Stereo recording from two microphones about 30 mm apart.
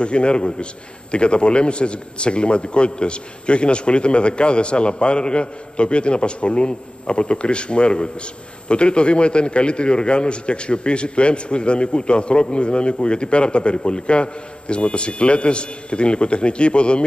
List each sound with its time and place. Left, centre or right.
0.0 s a man's voice: left